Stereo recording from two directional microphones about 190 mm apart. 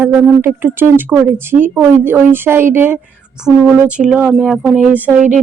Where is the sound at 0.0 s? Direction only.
10° right (ahead or behind).